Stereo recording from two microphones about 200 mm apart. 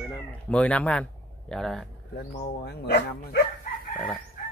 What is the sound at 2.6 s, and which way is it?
Speech, 55° left (ahead or behind).